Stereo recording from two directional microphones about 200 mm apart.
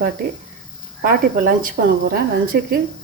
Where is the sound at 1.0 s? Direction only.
45° right (ahead or behind).